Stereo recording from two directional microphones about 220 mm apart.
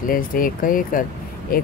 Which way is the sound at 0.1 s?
40° left (ahead or behind).